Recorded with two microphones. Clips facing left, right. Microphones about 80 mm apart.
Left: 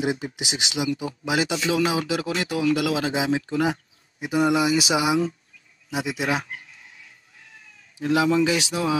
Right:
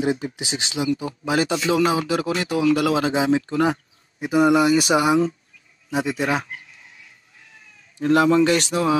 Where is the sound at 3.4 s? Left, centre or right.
Right.